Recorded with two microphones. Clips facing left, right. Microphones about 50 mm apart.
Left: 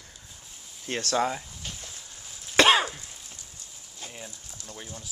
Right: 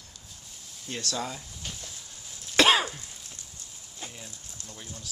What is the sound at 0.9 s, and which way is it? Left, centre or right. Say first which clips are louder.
Speech: left 7 dB; left.